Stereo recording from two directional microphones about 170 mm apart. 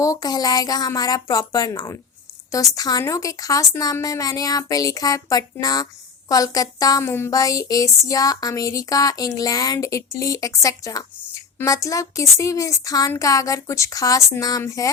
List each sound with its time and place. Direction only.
0.0 s a woman's voice: 20° left (ahead or behind)